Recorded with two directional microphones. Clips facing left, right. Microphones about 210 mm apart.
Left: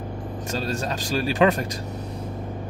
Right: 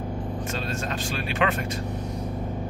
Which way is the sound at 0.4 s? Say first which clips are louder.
Left 7 dB; 40° left (ahead or behind).